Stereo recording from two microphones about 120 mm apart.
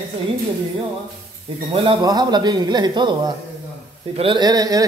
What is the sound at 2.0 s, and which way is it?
Speech, 35° right (ahead or behind).